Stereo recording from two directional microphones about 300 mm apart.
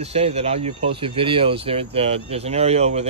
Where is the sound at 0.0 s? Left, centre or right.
Centre.